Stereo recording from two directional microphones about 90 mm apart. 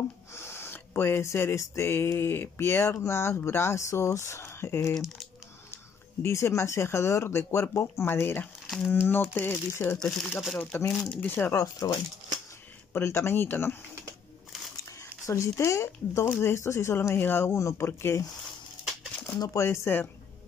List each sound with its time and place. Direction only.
0.3 s speech: 30° left (ahead or behind)
4.9 s speech: centre (ahead or behind)
6.2 s speech: 30° left (ahead or behind)
8.6 s a sound: centre (ahead or behind)
9.0 s speech: 25° left (ahead or behind)
11.5 s speech: 45° left (ahead or behind)
12.9 s speech: 25° left (ahead or behind)
14.9 s speech: 35° left (ahead or behind)
19.3 s speech: 45° left (ahead or behind)
19.6 s speech: 30° left (ahead or behind)